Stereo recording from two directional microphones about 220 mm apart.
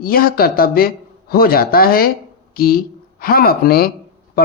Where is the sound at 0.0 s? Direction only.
45° left (ahead or behind).